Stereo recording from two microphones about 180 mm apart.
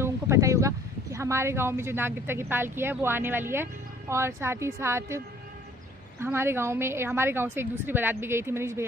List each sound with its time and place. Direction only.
0.0 s a woman's voice: 15° right (ahead or behind)